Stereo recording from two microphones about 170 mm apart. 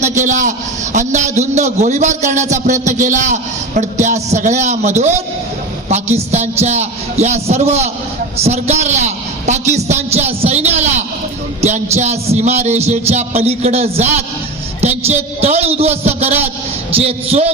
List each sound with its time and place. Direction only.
0.0 s a man's voice: 45° right (ahead or behind)